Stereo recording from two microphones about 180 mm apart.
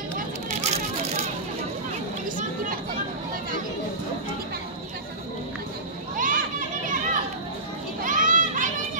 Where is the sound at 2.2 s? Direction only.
50° right (ahead or behind).